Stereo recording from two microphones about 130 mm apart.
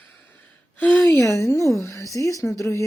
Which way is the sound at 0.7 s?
10° left (ahead or behind).